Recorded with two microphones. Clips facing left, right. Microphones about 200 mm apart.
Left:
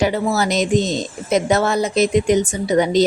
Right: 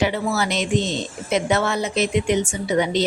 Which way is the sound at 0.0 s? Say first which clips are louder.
Left 3 dB; 40° left (ahead or behind).